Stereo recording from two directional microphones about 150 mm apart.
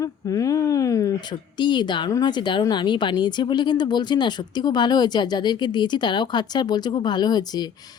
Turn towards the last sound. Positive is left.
turn(degrees=25)  # may be behind; listen again after turning